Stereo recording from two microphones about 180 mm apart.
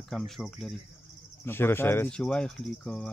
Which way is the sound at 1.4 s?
15° left (ahead or behind).